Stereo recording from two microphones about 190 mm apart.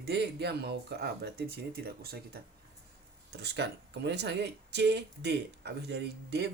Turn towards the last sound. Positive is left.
turn(degrees=-60)  # may be behind; listen again after turning